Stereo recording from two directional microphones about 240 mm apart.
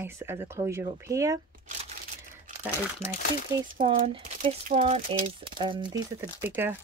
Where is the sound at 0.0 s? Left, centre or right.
Centre.